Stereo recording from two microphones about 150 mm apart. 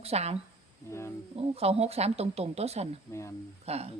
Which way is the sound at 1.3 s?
40° right (ahead or behind).